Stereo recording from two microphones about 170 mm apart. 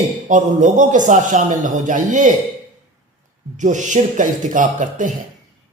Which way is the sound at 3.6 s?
45° right (ahead or behind).